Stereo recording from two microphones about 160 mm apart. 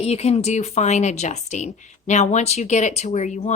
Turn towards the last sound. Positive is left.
turn(degrees=45)  # may be behind; listen again after turning